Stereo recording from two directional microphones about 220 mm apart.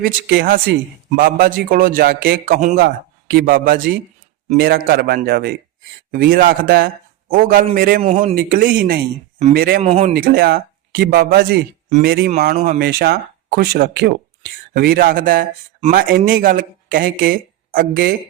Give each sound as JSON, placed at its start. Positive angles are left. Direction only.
{"t": 0.0, "sound": "a man's voice", "side_deg": -45}
{"t": 8.4, "sound": "a man's voice", "side_deg": -40}
{"t": 9.8, "sound": "speech", "side_deg": -30}
{"t": 10.2, "sound": "a man's voice", "side_deg": -45}
{"t": 12.5, "sound": "a man's voice", "side_deg": -35}
{"t": 12.8, "sound": "a man's voice", "side_deg": -45}